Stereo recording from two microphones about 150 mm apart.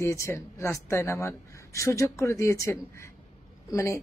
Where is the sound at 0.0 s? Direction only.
20° left (ahead or behind).